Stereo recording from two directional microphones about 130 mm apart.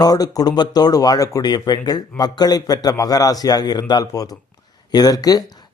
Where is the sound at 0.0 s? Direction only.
30° left (ahead or behind).